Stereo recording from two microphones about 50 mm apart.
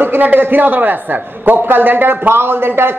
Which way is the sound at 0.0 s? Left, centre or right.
Right.